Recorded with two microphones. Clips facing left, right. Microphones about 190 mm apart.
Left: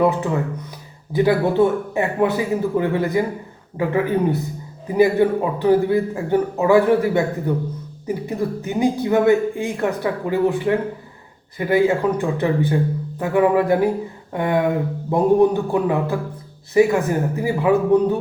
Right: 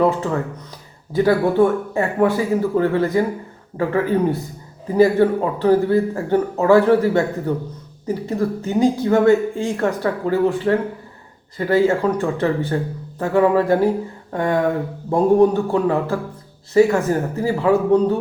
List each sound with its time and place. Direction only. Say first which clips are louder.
0.0 s speech: even; 15° left (ahead or behind)